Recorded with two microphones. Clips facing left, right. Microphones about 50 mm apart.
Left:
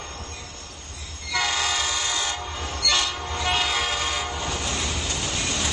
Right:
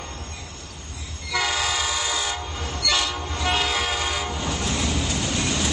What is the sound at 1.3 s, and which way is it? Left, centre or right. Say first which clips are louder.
Train: right 1 dB; centre.